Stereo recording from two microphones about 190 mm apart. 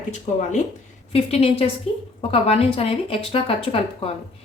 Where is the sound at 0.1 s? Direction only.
40° left (ahead or behind).